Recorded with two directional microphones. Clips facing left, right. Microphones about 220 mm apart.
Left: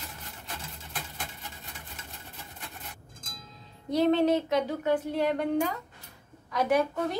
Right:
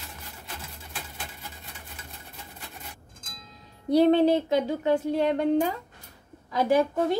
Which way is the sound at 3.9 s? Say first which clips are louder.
Right 4 dB; 30° right (ahead or behind).